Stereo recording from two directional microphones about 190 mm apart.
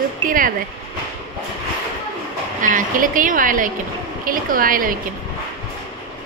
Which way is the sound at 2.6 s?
45° right (ahead or behind).